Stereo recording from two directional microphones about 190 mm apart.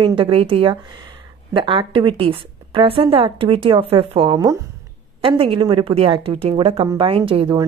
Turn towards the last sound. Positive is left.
turn(degrees=-30)  # may be behind; listen again after turning